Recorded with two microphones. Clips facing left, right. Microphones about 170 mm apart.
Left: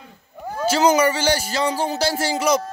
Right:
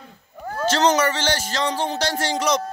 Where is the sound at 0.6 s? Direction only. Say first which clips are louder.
Left 2 dB; 10° left (ahead or behind).